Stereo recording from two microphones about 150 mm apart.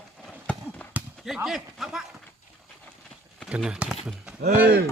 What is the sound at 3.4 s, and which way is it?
Speech, 5° right (ahead or behind).